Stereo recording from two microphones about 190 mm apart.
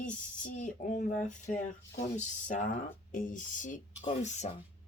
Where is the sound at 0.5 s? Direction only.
40° left (ahead or behind).